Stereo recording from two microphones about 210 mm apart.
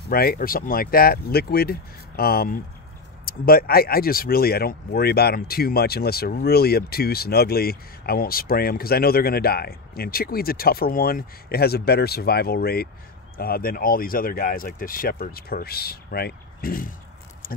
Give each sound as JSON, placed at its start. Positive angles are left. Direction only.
{"t": 0.1, "sound": "speech", "side_deg": 45}